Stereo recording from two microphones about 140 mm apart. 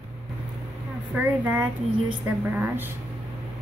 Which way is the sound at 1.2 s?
10° right (ahead or behind).